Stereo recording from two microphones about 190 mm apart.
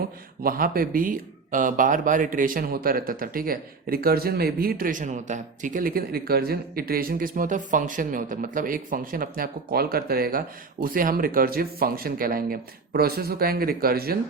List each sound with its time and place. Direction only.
0.4 s speech: 50° right (ahead or behind)